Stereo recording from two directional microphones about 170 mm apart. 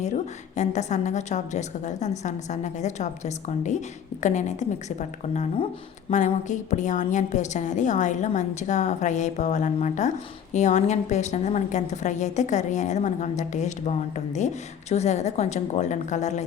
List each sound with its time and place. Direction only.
0.5 s a woman's voice: 45° left (ahead or behind)